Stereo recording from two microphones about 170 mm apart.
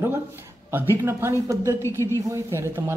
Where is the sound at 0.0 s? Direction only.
15° right (ahead or behind).